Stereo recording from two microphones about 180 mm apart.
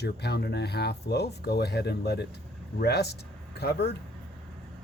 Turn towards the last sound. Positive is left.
turn(degrees=65)  # may be behind; listen again after turning